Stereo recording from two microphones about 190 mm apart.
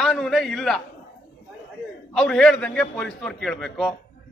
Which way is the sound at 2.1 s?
5° left (ahead or behind).